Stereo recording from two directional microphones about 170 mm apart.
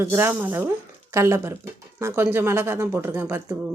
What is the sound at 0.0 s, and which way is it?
Speech, 15° right (ahead or behind).